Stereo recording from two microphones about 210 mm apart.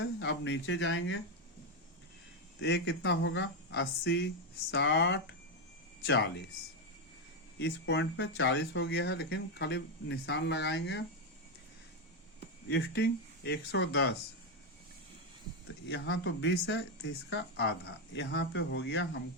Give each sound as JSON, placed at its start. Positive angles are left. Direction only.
{"t": 0.0, "sound": "speech", "side_deg": 55}
{"t": 2.6, "sound": "speech", "side_deg": 55}
{"t": 7.6, "sound": "speech", "side_deg": 60}
{"t": 12.6, "sound": "speech", "side_deg": 55}
{"t": 15.6, "sound": "speech", "side_deg": 55}